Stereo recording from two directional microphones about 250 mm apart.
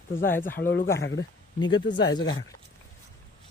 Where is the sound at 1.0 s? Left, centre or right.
Left.